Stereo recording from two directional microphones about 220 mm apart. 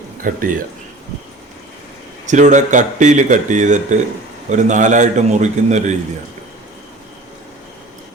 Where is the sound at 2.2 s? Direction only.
35° right (ahead or behind).